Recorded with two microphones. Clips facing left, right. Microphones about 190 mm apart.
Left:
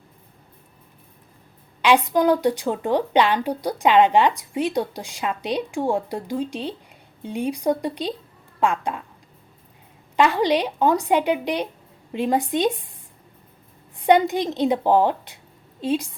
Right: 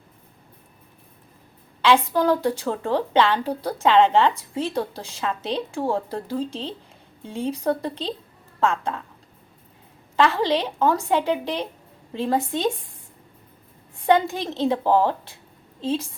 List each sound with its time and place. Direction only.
1.8 s a woman's voice: 15° left (ahead or behind)
10.2 s a woman's voice: 15° left (ahead or behind)
14.0 s a woman's voice: 15° left (ahead or behind)